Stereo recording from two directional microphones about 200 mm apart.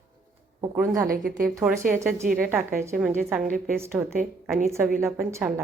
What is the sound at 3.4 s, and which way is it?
Speech, 45° right (ahead or behind).